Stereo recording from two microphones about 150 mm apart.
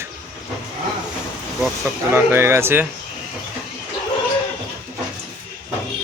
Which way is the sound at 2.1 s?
15° right (ahead or behind).